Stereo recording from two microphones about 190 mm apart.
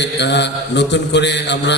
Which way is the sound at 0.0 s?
65° left (ahead or behind).